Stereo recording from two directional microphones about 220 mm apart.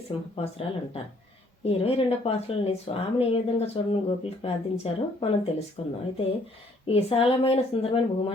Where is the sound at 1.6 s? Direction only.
25° left (ahead or behind).